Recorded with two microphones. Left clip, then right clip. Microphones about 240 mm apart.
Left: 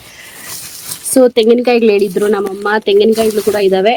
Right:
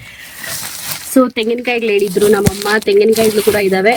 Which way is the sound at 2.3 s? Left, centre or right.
Left.